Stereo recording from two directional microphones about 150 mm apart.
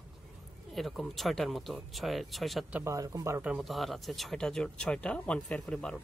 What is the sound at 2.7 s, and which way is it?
Speech, 20° right (ahead or behind).